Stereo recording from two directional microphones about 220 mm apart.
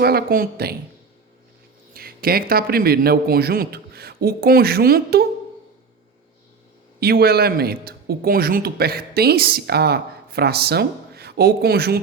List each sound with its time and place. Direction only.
0.0 s speech: 45° right (ahead or behind)
1.9 s a man's voice: 45° right (ahead or behind)
7.0 s speech: 45° right (ahead or behind)